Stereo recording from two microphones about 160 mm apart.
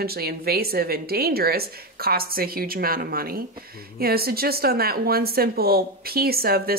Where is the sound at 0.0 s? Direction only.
75° right (ahead or behind).